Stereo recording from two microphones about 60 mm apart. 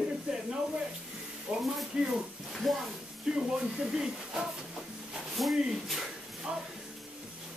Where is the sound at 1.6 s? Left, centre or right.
Centre.